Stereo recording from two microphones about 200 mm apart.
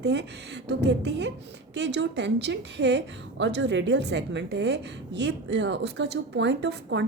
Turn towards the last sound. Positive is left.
turn(degrees=-60)  # may be behind; listen again after turning